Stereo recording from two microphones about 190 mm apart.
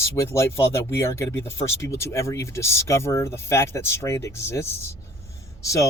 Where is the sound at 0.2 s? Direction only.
15° left (ahead or behind).